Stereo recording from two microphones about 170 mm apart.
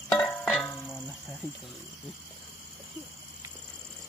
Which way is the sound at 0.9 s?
Centre (ahead or behind).